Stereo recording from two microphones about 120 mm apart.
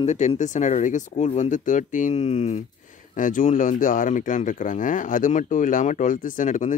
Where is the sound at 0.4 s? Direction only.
90° left; by 2.6 s 65° left (ahead or behind).